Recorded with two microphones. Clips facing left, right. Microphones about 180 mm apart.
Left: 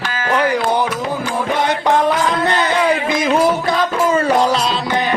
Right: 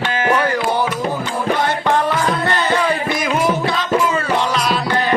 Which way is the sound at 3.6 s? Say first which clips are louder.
Left 1 dB; 40° left (ahead or behind).